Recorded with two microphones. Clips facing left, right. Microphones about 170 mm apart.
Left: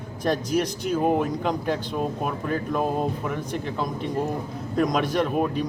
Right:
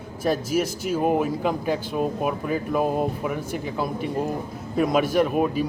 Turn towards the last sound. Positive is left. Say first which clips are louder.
# right 2 dB
turn(degrees=-5)  # may be behind; listen again after turning